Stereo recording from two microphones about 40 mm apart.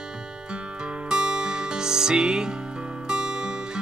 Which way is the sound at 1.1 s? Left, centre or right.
Right.